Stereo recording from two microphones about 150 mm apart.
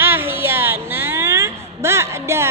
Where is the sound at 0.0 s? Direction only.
15° right (ahead or behind).